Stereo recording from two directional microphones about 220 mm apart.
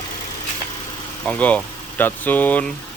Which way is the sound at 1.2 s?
5° left (ahead or behind).